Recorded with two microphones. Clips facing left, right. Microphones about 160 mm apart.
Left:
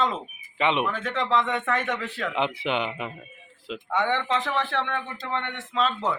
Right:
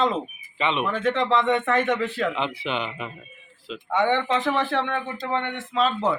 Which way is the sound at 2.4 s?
15° left (ahead or behind).